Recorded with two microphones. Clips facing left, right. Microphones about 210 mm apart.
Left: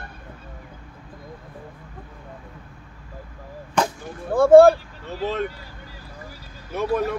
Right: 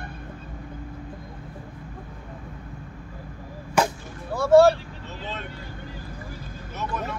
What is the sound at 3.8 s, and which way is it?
Whip, 5° right (ahead or behind).